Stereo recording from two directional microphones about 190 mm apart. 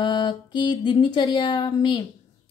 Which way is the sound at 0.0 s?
25° left (ahead or behind).